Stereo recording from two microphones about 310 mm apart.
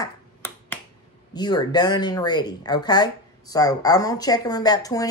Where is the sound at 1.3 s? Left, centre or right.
Centre.